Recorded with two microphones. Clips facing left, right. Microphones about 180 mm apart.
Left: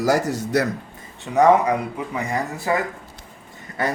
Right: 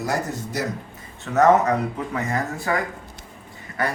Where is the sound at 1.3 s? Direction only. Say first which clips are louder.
Left 1 dB; 15° left (ahead or behind).